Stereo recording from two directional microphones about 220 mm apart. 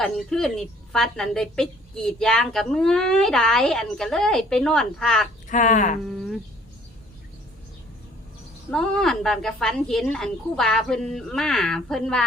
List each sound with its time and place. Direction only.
0.0 s a woman's voice: centre (ahead or behind)
5.5 s speech: 35° left (ahead or behind)
6.1 s speech: centre (ahead or behind)
8.7 s a woman's voice: 5° left (ahead or behind)